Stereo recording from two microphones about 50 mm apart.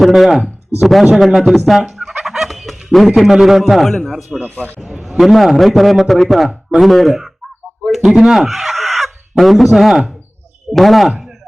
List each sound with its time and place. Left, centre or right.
0.0 s speech: centre
1.4 s fowl: centre
3.2 s speech: centre
4.4 s speech: left
4.8 s a man's voice: centre